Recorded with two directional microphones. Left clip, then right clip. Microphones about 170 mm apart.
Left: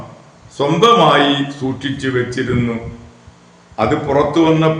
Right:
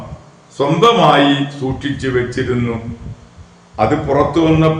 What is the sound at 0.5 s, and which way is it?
A man's voice, 15° left (ahead or behind).